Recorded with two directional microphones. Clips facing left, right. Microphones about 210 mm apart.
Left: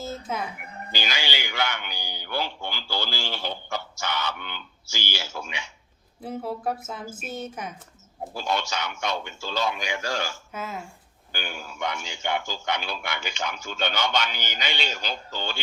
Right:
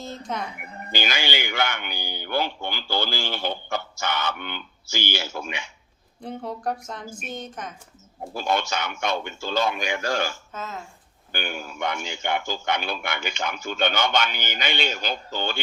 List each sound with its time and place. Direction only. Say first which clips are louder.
0.0 s speech: even; 5° left (ahead or behind)
0.9 s speech: right 4 dB; 50° right (ahead or behind)
6.2 s a woman's voice: even; 5° left (ahead or behind)
8.4 s speech: right 3 dB; 55° right (ahead or behind)
10.5 s speech: left 1 dB; 10° left (ahead or behind)
11.3 s a man's voice: right 4 dB; 55° right (ahead or behind)